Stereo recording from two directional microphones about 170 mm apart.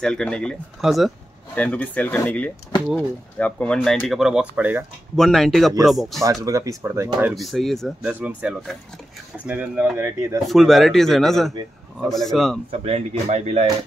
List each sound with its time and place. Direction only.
0.0 s speech: 5° left (ahead or behind)
2.7 s speech: 30° left (ahead or behind)
3.3 s speech: 10° left (ahead or behind); by 4.8 s 10° right (ahead or behind)
5.1 s speech: centre (ahead or behind)
6.4 s speech: 20° right (ahead or behind)
7.4 s speech: centre (ahead or behind)
8.0 s speech: 10° right (ahead or behind)
10.4 s speech: centre (ahead or behind)
12.8 s speech: 35° right (ahead or behind)